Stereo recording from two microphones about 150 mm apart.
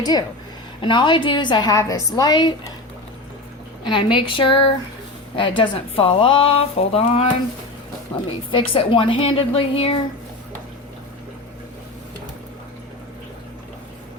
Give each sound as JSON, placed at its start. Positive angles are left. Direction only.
{"t": 0.0, "sound": "a woman's voice", "side_deg": 25}
{"t": 3.8, "sound": "speech", "side_deg": 35}
{"t": 8.5, "sound": "speech", "side_deg": 35}